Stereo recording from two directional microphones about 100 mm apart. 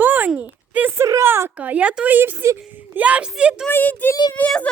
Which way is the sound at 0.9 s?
30° right (ahead or behind).